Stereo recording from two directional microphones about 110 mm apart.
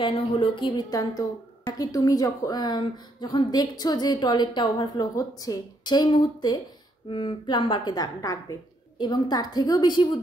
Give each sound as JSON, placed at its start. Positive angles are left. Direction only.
{"t": 0.0, "sound": "a woman's voice", "side_deg": 50}
{"t": 7.1, "sound": "a woman's voice", "side_deg": 50}